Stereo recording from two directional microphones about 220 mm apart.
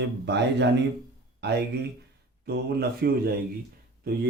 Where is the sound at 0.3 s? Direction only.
50° right (ahead or behind).